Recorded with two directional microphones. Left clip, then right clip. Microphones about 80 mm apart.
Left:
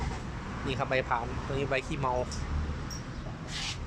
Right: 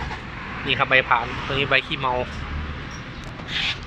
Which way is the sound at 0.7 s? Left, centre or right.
Centre.